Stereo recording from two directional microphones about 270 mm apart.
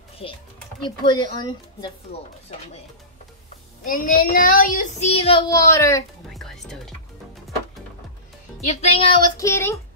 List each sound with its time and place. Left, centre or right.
0.2 s speech: left
3.8 s speech: left; by 6.0 s centre
6.3 s music: centre
8.6 s speech: left